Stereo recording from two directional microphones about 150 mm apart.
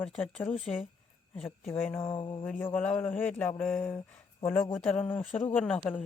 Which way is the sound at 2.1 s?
35° left (ahead or behind).